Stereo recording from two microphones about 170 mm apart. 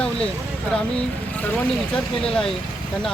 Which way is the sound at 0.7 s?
5° left (ahead or behind).